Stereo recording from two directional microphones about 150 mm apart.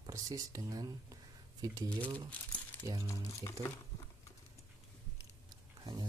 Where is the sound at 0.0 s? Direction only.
25° right (ahead or behind).